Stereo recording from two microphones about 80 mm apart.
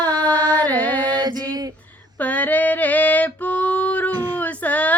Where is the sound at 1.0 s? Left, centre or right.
Right.